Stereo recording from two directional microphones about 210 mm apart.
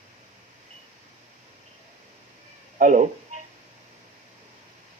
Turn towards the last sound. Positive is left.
turn(degrees=-35)  # may be behind; listen again after turning